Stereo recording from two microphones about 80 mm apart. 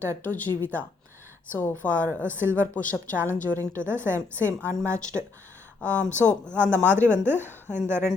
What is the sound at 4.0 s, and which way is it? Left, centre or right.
Speech, right.